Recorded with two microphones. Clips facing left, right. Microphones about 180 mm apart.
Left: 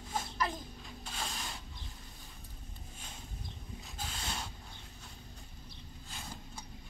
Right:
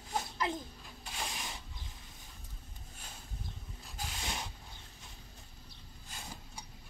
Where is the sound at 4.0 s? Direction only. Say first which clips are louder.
Right 1 dB; 15° right (ahead or behind).